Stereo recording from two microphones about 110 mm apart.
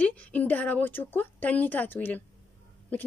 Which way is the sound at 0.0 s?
15° left (ahead or behind).